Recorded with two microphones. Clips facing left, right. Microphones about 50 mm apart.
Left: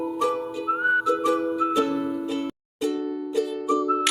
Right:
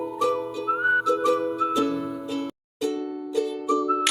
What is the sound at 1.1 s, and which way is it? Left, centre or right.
Music, left.